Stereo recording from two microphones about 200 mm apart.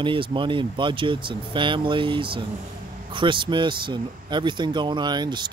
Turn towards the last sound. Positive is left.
turn(degrees=-20)  # may be behind; listen again after turning